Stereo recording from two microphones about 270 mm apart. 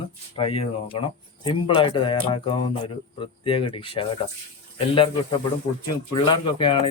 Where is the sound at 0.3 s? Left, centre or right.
Left.